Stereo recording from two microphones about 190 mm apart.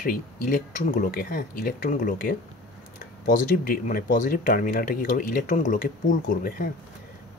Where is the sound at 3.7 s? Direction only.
45° left (ahead or behind).